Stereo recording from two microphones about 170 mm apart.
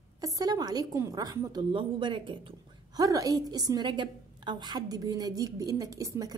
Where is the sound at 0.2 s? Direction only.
20° right (ahead or behind).